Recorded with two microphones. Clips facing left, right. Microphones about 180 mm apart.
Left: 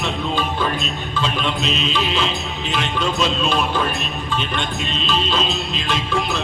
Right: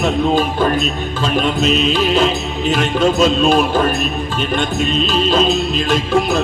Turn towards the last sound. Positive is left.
turn(degrees=-45)  # may be behind; listen again after turning